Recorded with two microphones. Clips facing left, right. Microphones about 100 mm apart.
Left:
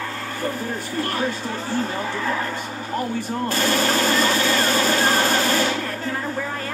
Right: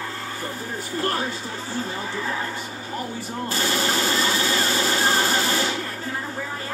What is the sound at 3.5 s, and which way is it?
Speech, 50° left (ahead or behind).